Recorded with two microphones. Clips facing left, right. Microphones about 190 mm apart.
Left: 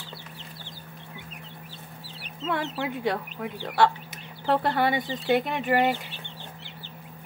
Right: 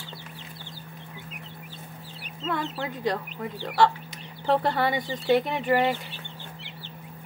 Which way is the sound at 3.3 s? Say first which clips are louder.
Right 1 dB; centre (ahead or behind).